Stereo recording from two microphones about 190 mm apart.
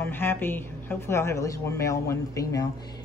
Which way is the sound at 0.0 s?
10° left (ahead or behind).